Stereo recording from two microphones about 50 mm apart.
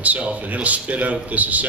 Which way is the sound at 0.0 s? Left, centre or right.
Right.